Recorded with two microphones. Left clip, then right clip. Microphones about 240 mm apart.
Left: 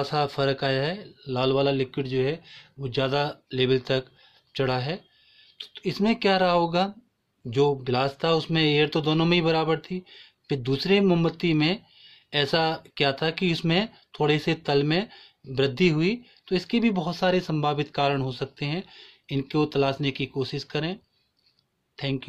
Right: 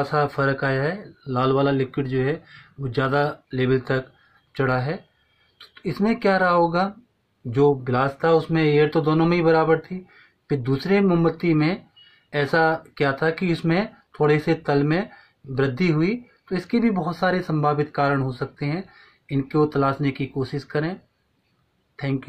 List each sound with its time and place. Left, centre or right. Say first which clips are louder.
0.0 s speech: right 3 dB; left